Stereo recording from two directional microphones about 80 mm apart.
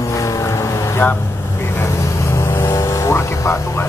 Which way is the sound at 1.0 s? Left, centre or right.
Left.